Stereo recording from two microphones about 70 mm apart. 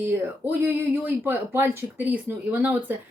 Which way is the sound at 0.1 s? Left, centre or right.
Right.